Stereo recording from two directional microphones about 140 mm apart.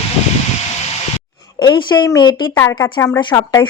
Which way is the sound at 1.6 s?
35° left (ahead or behind).